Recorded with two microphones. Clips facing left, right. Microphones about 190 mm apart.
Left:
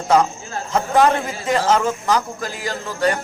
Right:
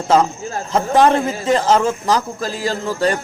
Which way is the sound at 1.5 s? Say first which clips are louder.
Right 2 dB; 30° right (ahead or behind).